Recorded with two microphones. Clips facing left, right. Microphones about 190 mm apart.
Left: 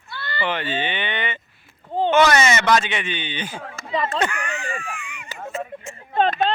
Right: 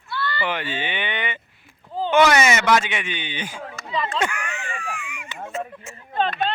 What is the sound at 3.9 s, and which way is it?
Speech, 45° left (ahead or behind).